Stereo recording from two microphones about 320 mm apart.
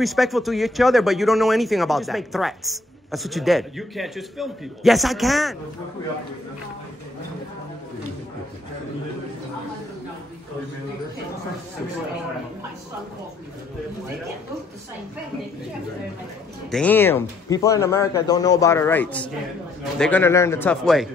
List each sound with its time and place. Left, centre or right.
0.0 s speech: centre
16.7 s speech: centre